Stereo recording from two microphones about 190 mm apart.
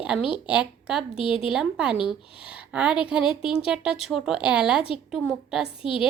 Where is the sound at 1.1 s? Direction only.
30° left (ahead or behind).